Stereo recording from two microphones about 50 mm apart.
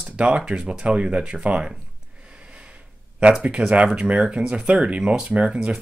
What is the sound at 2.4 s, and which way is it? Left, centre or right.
Snort, right.